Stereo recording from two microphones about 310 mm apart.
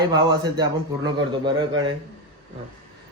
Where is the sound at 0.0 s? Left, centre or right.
Centre.